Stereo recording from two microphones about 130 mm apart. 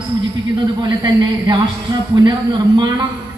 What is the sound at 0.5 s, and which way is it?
A man's voice, 35° right (ahead or behind).